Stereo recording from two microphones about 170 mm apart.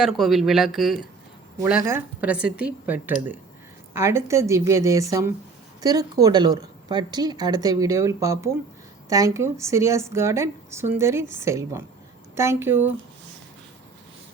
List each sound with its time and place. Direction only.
0.0 s a woman's voice: centre (ahead or behind)